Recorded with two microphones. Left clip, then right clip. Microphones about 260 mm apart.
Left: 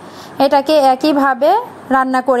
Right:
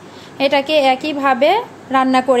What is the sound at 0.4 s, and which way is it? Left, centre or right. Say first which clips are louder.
A woman's voice: left 3 dB; left.